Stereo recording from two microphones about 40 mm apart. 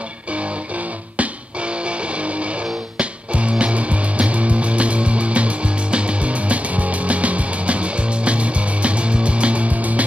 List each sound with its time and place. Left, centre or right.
1.1 s music: right